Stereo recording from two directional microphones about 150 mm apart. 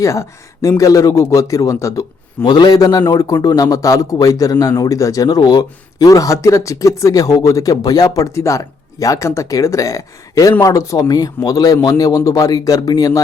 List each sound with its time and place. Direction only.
0.0 s speech: 20° left (ahead or behind)